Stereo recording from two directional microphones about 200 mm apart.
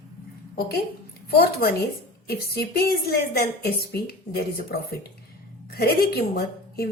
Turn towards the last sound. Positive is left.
turn(degrees=50)  # may be behind; listen again after turning